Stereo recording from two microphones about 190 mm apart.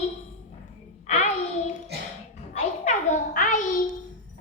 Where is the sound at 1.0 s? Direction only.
35° left (ahead or behind).